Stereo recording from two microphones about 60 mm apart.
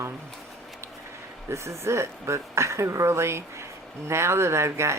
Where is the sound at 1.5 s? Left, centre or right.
Right.